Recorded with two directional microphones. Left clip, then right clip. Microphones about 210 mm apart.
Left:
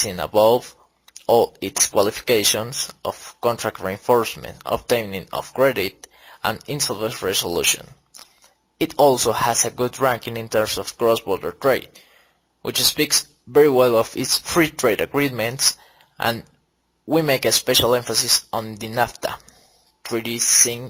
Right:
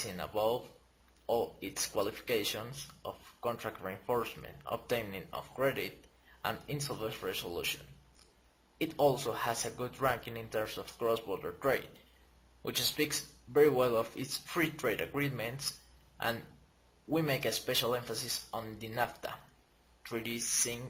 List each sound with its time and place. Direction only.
0.2 s speech: 50° left (ahead or behind)
8.8 s speech: 45° left (ahead or behind)